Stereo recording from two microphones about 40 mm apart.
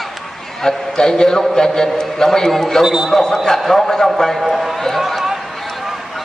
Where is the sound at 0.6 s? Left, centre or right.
Centre.